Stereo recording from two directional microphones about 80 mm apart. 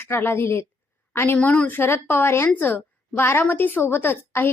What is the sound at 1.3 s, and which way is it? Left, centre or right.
Speech, centre.